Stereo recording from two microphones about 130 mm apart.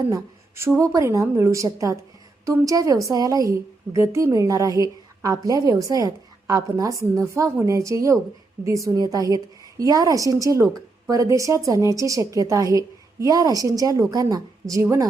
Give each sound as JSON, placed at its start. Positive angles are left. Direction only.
{"t": 0.1, "sound": "a woman's voice", "side_deg": -20}